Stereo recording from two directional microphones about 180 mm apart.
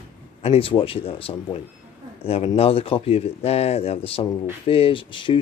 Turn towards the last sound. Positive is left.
turn(degrees=25)  # may be behind; listen again after turning